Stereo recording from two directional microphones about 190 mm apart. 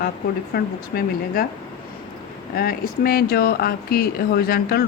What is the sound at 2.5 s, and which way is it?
A woman's voice, 50° left (ahead or behind).